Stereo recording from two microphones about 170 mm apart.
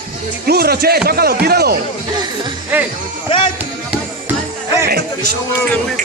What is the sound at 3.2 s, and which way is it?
Music, 30° left (ahead or behind).